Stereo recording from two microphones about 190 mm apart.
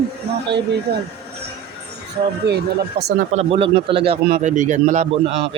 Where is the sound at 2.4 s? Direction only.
60° right (ahead or behind).